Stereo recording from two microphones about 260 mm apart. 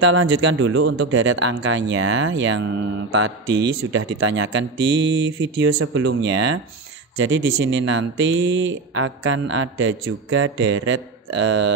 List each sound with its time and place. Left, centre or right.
0.0 s speech: right